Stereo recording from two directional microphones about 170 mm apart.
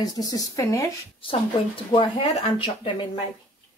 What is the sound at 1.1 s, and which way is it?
Speech, 30° left (ahead or behind).